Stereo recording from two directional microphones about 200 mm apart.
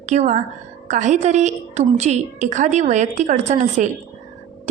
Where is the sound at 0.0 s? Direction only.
35° right (ahead or behind).